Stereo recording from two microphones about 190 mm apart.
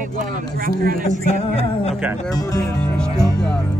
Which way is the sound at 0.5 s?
50° right (ahead or behind).